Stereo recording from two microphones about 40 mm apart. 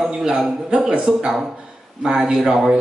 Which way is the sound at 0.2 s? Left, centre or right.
Centre.